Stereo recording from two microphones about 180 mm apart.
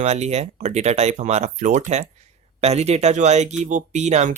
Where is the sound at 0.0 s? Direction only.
35° right (ahead or behind).